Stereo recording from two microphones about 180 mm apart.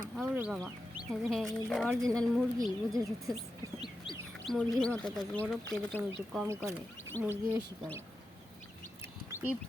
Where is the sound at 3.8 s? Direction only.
25° left (ahead or behind).